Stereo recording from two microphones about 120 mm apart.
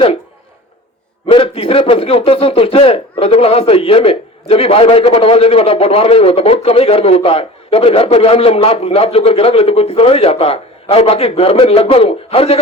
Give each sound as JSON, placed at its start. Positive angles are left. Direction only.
{"t": 1.3, "sound": "a man's voice", "side_deg": 50}